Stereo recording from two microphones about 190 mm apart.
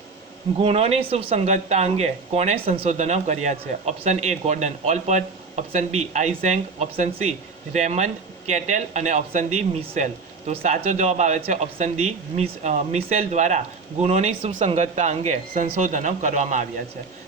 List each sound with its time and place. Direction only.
0.6 s speech: 30° right (ahead or behind)